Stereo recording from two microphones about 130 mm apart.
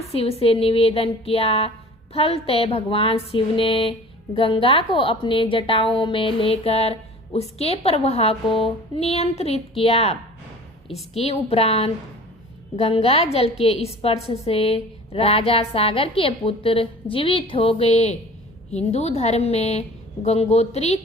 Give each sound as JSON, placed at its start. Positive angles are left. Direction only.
{"t": 0.1, "sound": "a woman's voice", "side_deg": 50}